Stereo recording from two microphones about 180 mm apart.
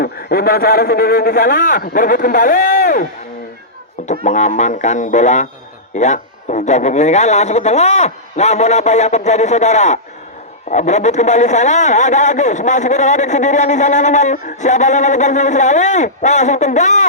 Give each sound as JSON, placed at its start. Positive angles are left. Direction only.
{"t": 0.0, "sound": "a man's voice", "side_deg": 55}
{"t": 4.0, "sound": "a man's voice", "side_deg": 40}